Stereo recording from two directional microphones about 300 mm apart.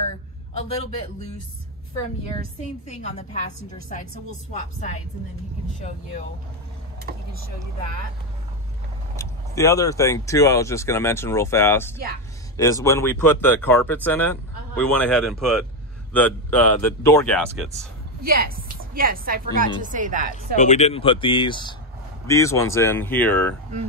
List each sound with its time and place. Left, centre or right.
2.9 s a woman's voice: left
4.5 s a woman's voice: left
9.1 s speech: centre
18.2 s a woman's voice: right
20.5 s speech: left; by 23.5 s centre